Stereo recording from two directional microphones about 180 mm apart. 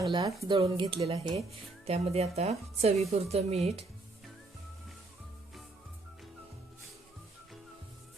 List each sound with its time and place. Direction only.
0.1 s a woman's voice: 20° right (ahead or behind); by 3.8 s 35° right (ahead or behind)